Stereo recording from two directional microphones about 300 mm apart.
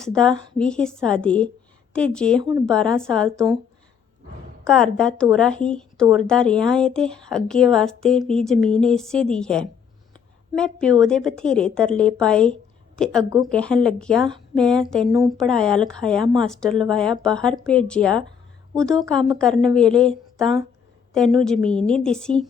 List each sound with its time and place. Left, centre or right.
0.0 s speech: centre
2.4 s speech: centre
2.6 s speech: centre
4.6 s speech: centre
15.0 s speech: centre
15.4 s speech: centre